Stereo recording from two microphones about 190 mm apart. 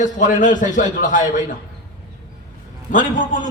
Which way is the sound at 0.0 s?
40° left (ahead or behind).